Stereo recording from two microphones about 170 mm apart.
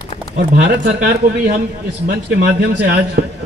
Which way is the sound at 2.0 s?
70° right (ahead or behind).